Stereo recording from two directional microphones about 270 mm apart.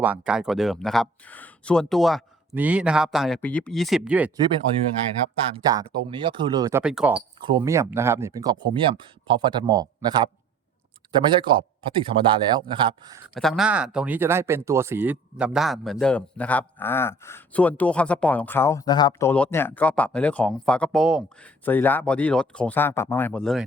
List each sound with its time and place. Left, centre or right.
0.0 s speech: centre
5.5 s a man's voice: centre
7.1 s a man's voice: centre
13.3 s speech: centre